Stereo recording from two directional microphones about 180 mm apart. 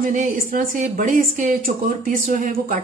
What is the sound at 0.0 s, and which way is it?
A woman's voice, 45° right (ahead or behind).